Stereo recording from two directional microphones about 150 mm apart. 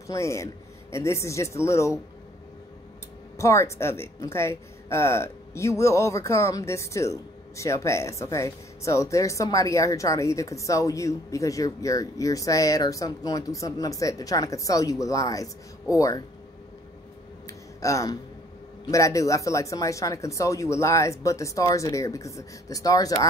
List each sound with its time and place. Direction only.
0.0 s a man's voice: 20° left (ahead or behind)
3.3 s a woman's voice: 20° left (ahead or behind)
17.5 s a sound: 20° left (ahead or behind)
18.9 s a woman's voice: 20° left (ahead or behind)